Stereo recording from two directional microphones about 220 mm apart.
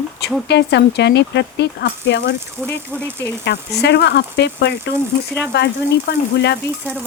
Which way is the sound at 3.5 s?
50° left (ahead or behind).